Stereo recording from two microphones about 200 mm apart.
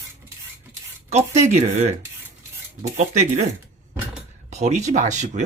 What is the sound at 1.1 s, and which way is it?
Speech, 35° right (ahead or behind).